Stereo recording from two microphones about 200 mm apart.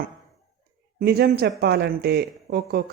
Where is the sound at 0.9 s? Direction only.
50° right (ahead or behind).